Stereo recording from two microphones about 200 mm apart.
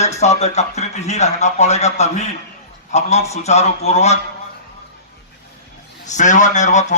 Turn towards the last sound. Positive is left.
turn(degrees=35)  # may be behind; listen again after turning